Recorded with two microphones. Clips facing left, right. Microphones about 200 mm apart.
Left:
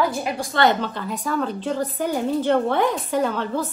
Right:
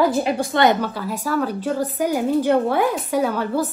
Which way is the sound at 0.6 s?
10° right (ahead or behind).